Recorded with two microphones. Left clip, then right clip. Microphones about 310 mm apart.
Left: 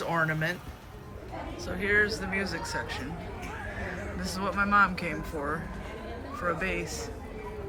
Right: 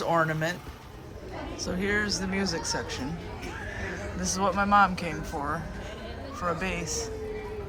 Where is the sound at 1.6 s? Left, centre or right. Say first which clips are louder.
Left 3 dB; centre.